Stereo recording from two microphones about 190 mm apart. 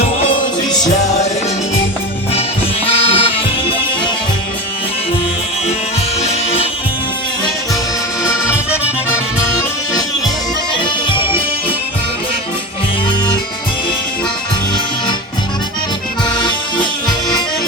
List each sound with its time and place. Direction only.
2.8 s music: 30° left (ahead or behind)
6.2 s music: 30° left (ahead or behind)
10.8 s music: 25° left (ahead or behind)